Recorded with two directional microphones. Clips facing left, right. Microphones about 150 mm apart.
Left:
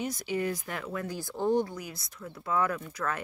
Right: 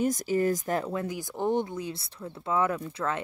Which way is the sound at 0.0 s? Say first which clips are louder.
Right 6 dB; 45° right (ahead or behind).